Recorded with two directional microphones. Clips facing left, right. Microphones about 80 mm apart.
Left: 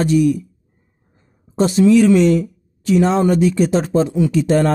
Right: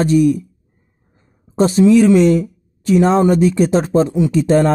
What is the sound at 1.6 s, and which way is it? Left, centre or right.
Speech, right.